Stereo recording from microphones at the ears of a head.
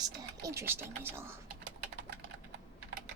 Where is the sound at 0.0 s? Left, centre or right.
Right.